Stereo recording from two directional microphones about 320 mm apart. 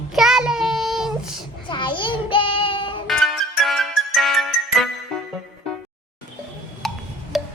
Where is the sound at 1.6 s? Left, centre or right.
Centre.